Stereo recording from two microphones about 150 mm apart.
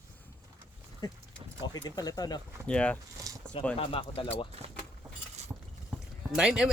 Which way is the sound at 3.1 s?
25° right (ahead or behind).